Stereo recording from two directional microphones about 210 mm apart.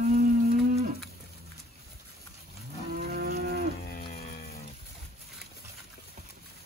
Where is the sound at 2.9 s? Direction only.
45° right (ahead or behind).